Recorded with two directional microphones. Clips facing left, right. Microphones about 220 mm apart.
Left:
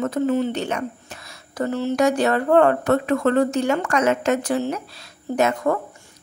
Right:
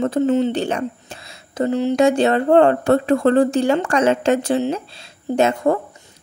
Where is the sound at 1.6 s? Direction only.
15° right (ahead or behind).